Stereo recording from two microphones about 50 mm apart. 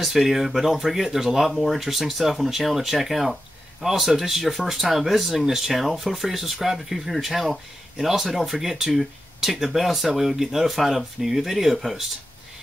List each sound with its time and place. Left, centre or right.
0.0 s speech: centre